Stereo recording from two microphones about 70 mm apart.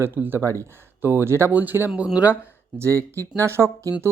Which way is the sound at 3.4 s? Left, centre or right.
Right.